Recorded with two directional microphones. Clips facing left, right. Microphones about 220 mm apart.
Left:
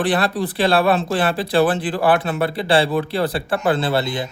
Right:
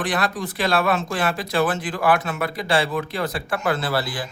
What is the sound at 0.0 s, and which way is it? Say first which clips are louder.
Speech: left 5 dB; 35° left (ahead or behind).